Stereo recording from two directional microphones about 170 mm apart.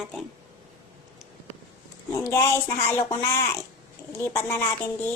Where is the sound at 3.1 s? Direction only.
20° left (ahead or behind).